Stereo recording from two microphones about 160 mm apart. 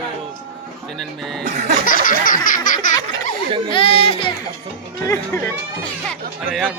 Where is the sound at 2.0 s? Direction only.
60° left (ahead or behind).